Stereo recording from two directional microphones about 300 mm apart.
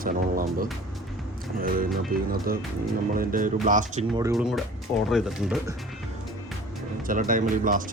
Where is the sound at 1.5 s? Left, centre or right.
Right.